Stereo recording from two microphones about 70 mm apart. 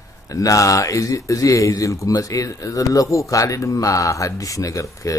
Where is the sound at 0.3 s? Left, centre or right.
Left.